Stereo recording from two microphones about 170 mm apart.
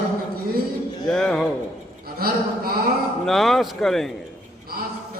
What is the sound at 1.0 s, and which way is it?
Speech, 5° left (ahead or behind).